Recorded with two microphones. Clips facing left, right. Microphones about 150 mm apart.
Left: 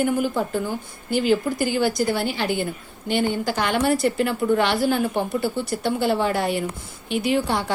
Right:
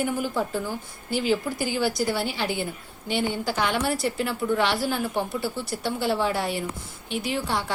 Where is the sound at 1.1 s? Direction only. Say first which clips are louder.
Left 4 dB; 50° left (ahead or behind).